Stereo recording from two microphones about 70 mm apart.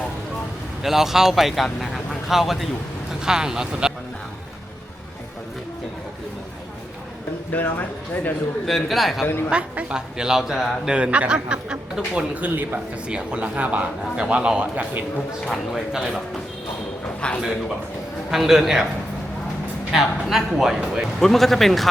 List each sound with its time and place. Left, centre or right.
0.8 s speech: centre
7.5 s speech: left
8.6 s speech: centre
9.5 s speech: centre
15.4 s speech: centre
17.2 s a man's voice: centre
18.3 s speech: centre
19.9 s speech: centre
21.2 s speech: centre